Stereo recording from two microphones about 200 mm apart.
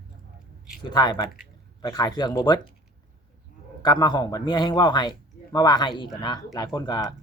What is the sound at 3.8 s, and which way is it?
Speech, 20° left (ahead or behind).